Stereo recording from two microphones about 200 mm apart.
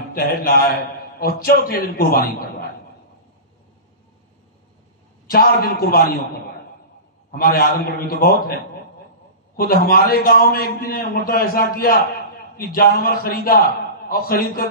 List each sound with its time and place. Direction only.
0.1 s a man's voice: 45° left (ahead or behind)
5.2 s a man's voice: 50° left (ahead or behind)
7.2 s a man's voice: 45° left (ahead or behind)
9.6 s a man's voice: 50° left (ahead or behind)